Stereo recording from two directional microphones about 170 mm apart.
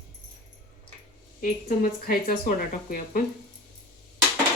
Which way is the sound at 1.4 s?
55° left (ahead or behind).